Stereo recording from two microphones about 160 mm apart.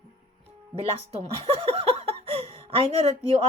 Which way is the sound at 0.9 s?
40° right (ahead or behind).